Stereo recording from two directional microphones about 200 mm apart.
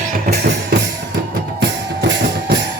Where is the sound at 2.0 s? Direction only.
65° right (ahead or behind).